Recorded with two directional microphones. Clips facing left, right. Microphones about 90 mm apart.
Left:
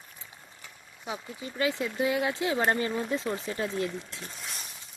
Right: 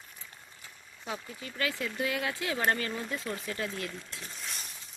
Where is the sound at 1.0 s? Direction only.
15° left (ahead or behind).